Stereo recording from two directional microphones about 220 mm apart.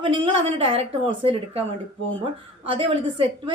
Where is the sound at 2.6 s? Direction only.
25° right (ahead or behind).